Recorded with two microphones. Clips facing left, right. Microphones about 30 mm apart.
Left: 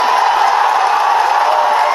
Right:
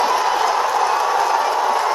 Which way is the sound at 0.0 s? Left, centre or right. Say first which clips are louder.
Left 6 dB; left.